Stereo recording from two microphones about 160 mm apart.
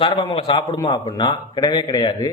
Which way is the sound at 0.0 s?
35° left (ahead or behind).